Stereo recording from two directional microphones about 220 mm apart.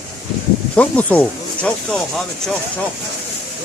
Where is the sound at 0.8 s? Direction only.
5° left (ahead or behind).